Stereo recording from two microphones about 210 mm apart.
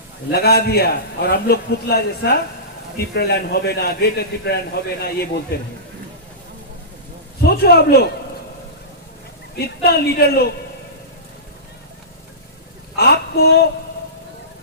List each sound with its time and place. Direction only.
0.3 s a man's voice: 50° left (ahead or behind)
7.4 s a man's voice: 50° left (ahead or behind)
9.6 s a man's voice: 50° left (ahead or behind)
13.0 s a man's voice: 50° left (ahead or behind)